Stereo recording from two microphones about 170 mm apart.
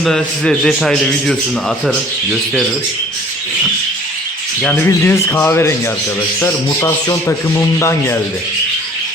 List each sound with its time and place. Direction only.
0.0 s a man's voice: 5° left (ahead or behind)
4.6 s speech: 10° left (ahead or behind)